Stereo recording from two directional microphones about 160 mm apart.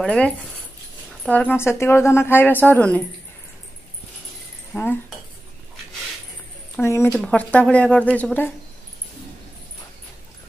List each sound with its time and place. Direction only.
0.0 s a woman's voice: 5° left (ahead or behind)
4.7 s a woman's voice: 10° left (ahead or behind)
6.8 s a woman's voice: 15° left (ahead or behind)
7.1 s a woman's voice: 5° left (ahead or behind)